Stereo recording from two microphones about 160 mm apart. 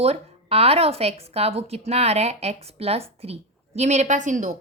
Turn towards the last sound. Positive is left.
turn(degrees=-50)  # may be behind; listen again after turning